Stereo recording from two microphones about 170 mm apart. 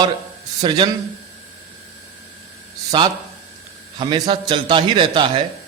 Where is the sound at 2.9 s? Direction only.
25° right (ahead or behind).